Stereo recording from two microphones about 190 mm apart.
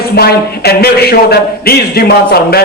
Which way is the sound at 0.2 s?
55° left (ahead or behind).